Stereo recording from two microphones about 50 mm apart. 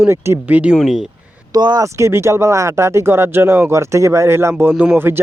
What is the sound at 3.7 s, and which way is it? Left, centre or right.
Speech, right.